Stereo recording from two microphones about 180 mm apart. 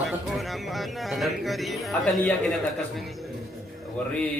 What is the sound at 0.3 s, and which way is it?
Speech, centre (ahead or behind).